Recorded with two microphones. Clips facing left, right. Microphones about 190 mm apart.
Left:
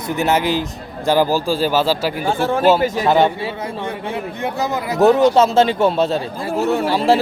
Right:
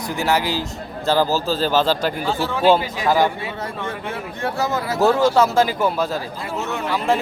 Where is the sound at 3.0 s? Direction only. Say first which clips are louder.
Left 3 dB; 25° left (ahead or behind).